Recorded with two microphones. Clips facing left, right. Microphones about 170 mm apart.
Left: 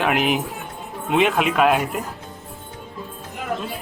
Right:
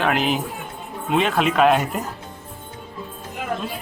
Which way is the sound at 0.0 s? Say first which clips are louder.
Left 1 dB; 15° left (ahead or behind).